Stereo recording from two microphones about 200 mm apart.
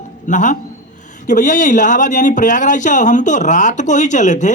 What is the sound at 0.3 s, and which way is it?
A man's voice, 40° left (ahead or behind).